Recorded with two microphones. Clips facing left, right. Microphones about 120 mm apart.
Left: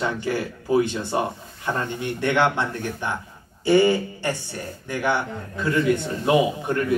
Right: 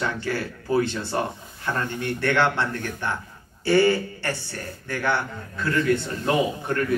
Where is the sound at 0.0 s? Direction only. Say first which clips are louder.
Left 2 dB; 15° left (ahead or behind).